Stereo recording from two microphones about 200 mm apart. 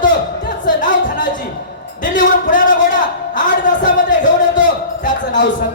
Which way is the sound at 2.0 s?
40° left (ahead or behind).